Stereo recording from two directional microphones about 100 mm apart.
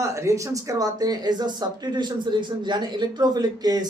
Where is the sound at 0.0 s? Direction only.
30° right (ahead or behind).